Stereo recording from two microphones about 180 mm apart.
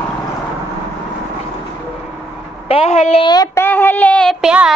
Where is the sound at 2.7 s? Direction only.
35° left (ahead or behind).